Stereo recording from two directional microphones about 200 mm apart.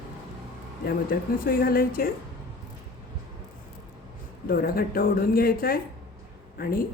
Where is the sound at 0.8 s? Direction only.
50° left (ahead or behind).